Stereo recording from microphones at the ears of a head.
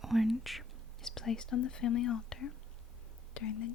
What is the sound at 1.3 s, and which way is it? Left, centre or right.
Speech, left.